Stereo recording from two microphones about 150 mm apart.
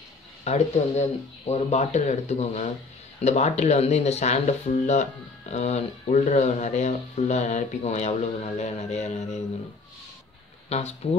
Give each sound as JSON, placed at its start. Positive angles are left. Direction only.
{"t": 0.4, "sound": "speech", "side_deg": 45}
{"t": 10.7, "sound": "speech", "side_deg": 45}